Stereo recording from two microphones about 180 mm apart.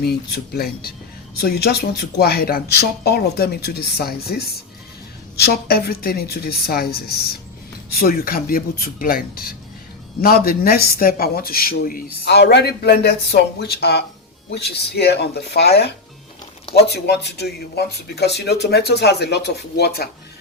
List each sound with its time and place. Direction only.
0.0 s speech: 60° left (ahead or behind)